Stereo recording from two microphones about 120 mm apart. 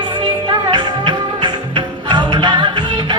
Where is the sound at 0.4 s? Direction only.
35° right (ahead or behind).